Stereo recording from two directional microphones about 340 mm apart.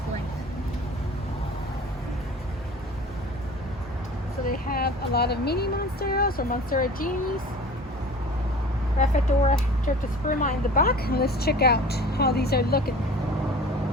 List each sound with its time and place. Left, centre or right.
4.4 s speech: left
9.0 s speech: left